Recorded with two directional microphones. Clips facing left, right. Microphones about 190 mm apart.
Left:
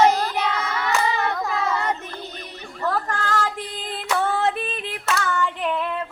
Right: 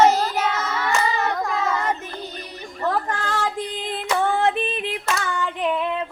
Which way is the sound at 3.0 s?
15° right (ahead or behind).